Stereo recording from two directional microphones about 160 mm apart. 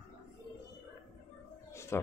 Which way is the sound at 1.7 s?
15° left (ahead or behind).